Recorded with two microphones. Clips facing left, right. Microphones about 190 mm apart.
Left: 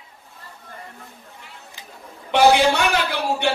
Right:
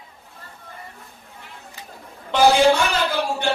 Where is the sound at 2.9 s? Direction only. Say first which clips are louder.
Even; 65° left (ahead or behind).